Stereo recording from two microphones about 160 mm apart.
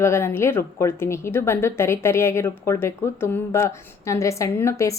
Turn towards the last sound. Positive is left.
turn(degrees=20)  # may be behind; listen again after turning